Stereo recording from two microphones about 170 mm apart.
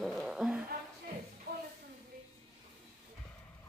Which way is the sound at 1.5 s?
65° right (ahead or behind).